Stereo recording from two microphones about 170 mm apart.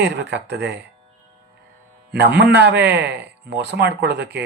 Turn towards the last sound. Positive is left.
turn(degrees=-80)